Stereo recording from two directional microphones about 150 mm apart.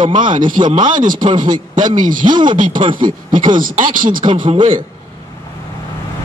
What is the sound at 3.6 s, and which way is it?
Speech, 65° right (ahead or behind).